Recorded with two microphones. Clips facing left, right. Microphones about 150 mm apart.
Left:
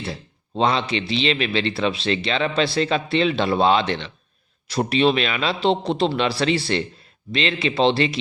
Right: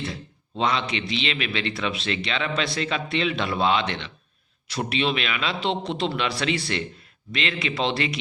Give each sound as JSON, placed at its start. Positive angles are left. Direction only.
{"t": 0.0, "sound": "a man's voice", "side_deg": 35}